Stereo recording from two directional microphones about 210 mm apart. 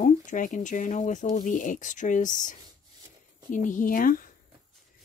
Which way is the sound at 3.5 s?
40° left (ahead or behind).